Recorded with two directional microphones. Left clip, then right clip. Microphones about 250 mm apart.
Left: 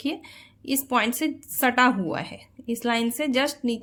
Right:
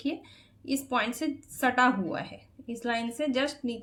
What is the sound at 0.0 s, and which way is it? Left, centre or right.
A woman's voice, left.